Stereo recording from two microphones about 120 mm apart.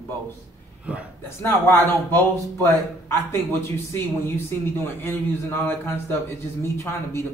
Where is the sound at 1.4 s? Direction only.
20° left (ahead or behind).